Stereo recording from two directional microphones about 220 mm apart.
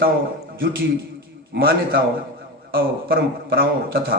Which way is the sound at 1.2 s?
45° right (ahead or behind).